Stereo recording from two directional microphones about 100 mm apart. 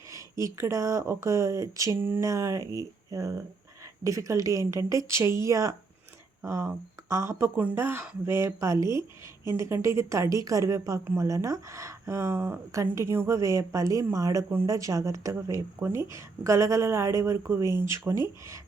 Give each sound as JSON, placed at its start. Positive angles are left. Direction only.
{"t": 0.1, "sound": "a woman's voice", "side_deg": -30}